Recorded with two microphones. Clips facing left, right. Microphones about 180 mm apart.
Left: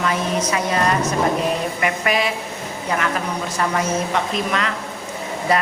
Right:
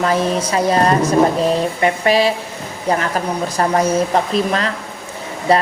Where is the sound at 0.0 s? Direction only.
35° right (ahead or behind).